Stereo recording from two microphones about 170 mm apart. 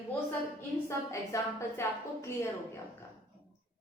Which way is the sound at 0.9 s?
15° left (ahead or behind).